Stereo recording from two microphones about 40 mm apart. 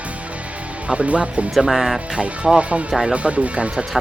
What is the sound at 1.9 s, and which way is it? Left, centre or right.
Speech, right.